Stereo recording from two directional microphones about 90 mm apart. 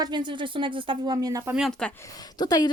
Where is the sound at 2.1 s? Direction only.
45° left (ahead or behind).